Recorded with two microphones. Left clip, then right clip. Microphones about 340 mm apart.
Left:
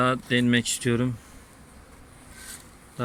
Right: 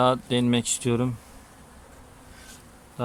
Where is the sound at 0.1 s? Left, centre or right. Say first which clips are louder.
Even; centre.